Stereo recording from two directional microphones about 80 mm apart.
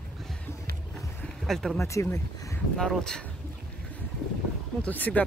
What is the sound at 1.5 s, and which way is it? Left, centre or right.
Speech, centre.